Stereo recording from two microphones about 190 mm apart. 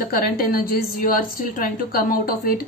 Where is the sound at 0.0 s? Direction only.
50° left (ahead or behind).